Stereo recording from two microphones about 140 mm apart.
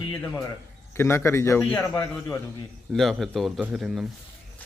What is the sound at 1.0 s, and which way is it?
Speech, 20° left (ahead or behind).